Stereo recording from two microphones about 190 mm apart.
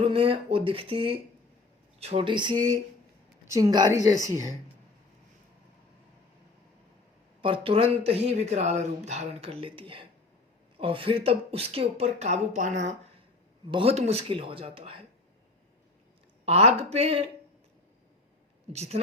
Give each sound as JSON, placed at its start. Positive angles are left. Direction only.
{"t": 0.0, "sound": "a woman's voice", "side_deg": -30}
{"t": 7.4, "sound": "speech", "side_deg": -30}
{"t": 16.5, "sound": "speech", "side_deg": -35}
{"t": 18.7, "sound": "speech", "side_deg": -35}